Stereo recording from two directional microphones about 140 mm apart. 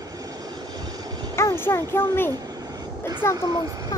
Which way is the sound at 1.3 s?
20° left (ahead or behind).